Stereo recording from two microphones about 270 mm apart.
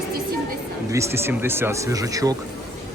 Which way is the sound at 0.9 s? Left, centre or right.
Centre.